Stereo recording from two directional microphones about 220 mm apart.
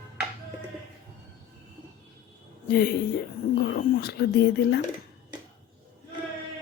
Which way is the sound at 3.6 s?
45° left (ahead or behind).